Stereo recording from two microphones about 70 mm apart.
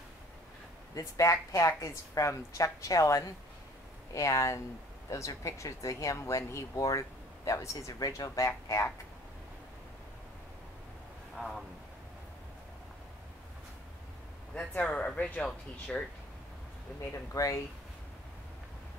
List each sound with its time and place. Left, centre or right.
0.9 s speech: left
11.3 s speech: centre
14.8 s speech: centre
17.1 s speech: left